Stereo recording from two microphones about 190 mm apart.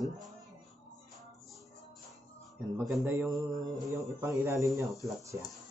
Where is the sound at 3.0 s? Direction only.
15° right (ahead or behind).